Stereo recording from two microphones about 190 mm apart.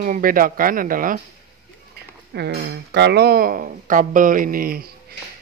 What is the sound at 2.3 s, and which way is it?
Speech, 60° right (ahead or behind).